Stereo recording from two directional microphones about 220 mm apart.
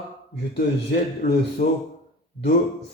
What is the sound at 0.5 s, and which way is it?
Speech, 50° left (ahead or behind).